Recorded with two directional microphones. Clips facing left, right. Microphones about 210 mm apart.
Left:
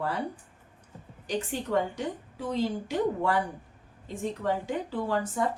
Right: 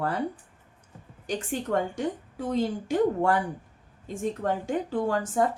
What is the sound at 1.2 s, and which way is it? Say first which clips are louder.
A woman's voice: right 1 dB; 50° right (ahead or behind).